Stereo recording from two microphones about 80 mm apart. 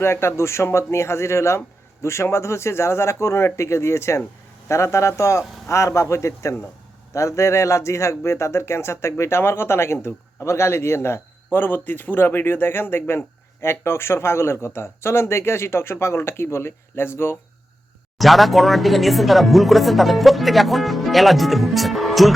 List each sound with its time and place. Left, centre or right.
0.0 s speech: left
18.2 s speech: centre